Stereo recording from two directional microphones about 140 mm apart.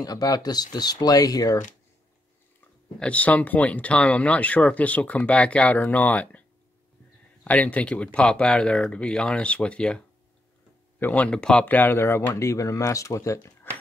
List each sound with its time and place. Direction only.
0.0 s speech: 25° left (ahead or behind)
3.0 s speech: 10° left (ahead or behind)
7.4 s speech: 10° left (ahead or behind)